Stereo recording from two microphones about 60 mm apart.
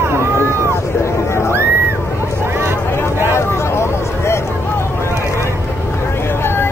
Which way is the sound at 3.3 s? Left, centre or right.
Left.